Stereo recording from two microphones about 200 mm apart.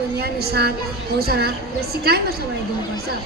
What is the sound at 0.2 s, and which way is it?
A woman's voice, 50° right (ahead or behind).